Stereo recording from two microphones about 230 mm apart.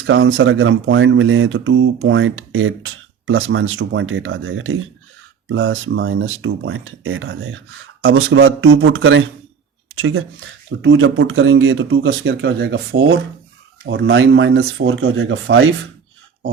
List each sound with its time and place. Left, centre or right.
0.0 s speech: right